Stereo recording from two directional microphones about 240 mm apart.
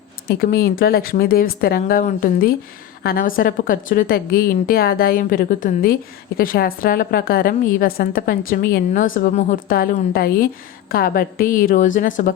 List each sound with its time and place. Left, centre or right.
0.3 s a woman's voice: left